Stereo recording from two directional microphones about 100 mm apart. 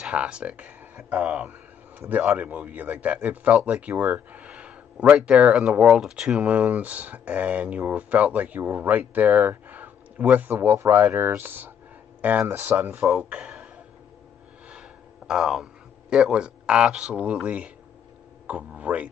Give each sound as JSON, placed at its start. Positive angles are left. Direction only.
{"t": 0.0, "sound": "speech", "side_deg": -10}
{"t": 14.7, "sound": "a sound", "side_deg": -10}
{"t": 18.5, "sound": "speech", "side_deg": -15}